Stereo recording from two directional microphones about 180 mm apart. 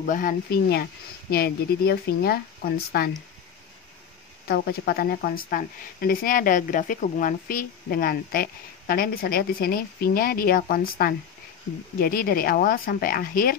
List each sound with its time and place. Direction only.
0.0 s speech: 50° left (ahead or behind)
4.5 s a woman's voice: 60° left (ahead or behind)